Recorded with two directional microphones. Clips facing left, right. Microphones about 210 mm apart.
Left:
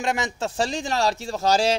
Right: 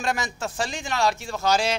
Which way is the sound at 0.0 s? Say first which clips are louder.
Left 2 dB; 25° left (ahead or behind).